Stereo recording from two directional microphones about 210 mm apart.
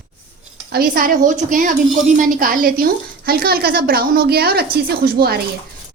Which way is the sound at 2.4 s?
40° right (ahead or behind).